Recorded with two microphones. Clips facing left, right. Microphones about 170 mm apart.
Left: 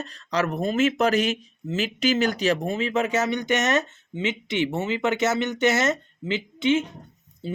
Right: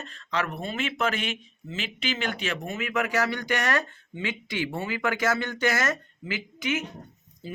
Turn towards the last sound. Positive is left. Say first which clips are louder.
# left 6 dB
turn(degrees=30)  # may be behind; listen again after turning